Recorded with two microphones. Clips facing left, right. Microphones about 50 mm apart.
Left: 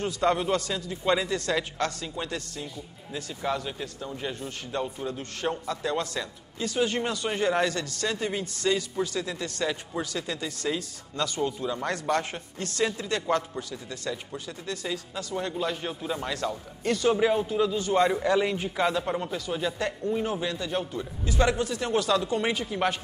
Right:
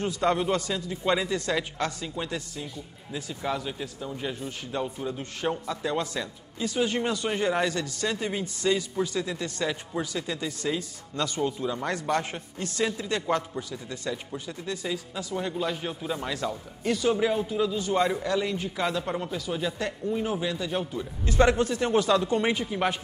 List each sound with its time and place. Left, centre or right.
0.2 s a man's voice: centre
0.6 s a man's voice: centre
10.8 s speech: right
11.4 s a man's voice: centre
12.8 s a man's voice: centre
13.1 s a man's voice: centre
14.9 s a man's voice: centre
17.1 s a man's voice: centre
18.2 s speech: centre
18.8 s a man's voice: centre
21.3 s a man's voice: right
21.9 s a man's voice: centre